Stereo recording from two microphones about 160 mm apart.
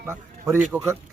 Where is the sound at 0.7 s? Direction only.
10° right (ahead or behind).